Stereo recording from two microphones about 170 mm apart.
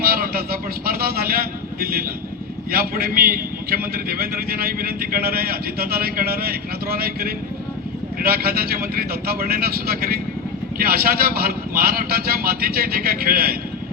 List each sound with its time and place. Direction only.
0.0 s vehicle: 60° right (ahead or behind)
2.7 s a man's voice: 60° right (ahead or behind)